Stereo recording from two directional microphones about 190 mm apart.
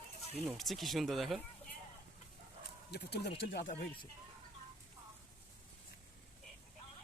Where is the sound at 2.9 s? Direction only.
60° left (ahead or behind).